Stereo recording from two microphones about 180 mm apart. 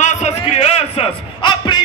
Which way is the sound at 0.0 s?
40° left (ahead or behind).